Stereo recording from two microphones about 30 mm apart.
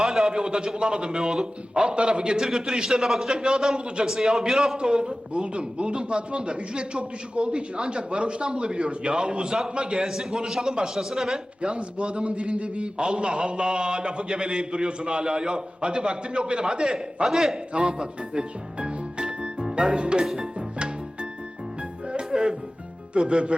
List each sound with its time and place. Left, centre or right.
0.0 s a sound: centre
0.3 s a man's voice: right
2.6 s a man's voice: centre
4.8 s a man's voice: right
10.1 s a man's voice: centre
11.6 s a man's voice: right
17.2 s a man's voice: centre
17.7 s speech: right
22.3 s music: right
23.1 s a man's voice: right